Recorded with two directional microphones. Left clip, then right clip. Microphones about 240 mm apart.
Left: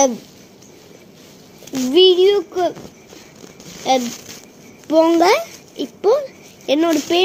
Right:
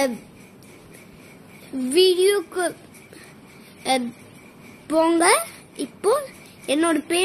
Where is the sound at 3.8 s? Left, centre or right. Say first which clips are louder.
Left 6 dB; centre.